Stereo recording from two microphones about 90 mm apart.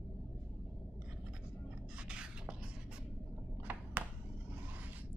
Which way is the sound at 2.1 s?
10° right (ahead or behind).